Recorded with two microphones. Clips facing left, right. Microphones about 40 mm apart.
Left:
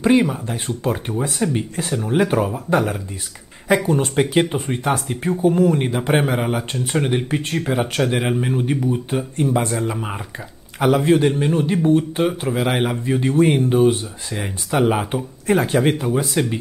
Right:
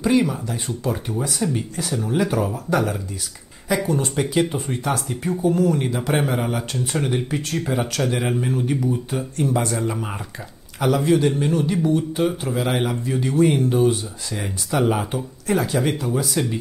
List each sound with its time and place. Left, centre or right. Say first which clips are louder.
0.0 s speech: left 3 dB; left
3.6 s speech: left 4 dB; left; by 10.2 s centre
10.8 s speech: left 3 dB; left